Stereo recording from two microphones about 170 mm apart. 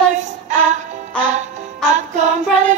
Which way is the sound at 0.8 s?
45° right (ahead or behind).